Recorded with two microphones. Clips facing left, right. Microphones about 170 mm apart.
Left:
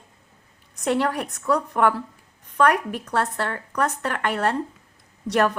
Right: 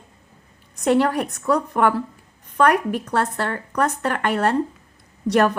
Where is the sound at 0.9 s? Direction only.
20° right (ahead or behind).